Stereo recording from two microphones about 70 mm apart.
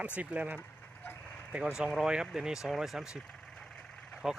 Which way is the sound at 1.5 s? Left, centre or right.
Centre.